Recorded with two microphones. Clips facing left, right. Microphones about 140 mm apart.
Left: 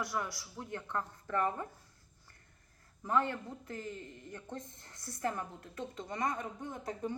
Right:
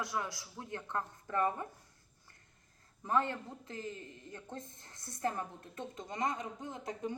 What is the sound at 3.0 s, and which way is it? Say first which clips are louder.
A woman's voice: left 1 dB; 20° right (ahead or behind).